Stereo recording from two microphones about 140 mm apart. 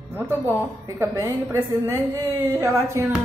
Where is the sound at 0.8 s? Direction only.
25° right (ahead or behind).